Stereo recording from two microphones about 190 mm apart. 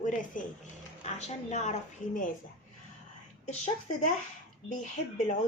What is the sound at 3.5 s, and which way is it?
Speech, 35° left (ahead or behind).